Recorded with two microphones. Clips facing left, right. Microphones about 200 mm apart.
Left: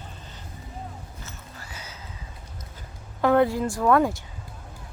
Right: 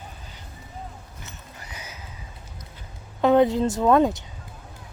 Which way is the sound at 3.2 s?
20° right (ahead or behind).